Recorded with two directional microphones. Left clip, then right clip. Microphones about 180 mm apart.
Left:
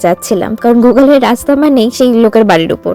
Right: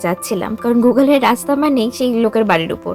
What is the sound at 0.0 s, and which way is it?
Speech, 30° left (ahead or behind).